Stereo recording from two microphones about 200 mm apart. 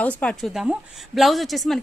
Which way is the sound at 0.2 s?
5° left (ahead or behind).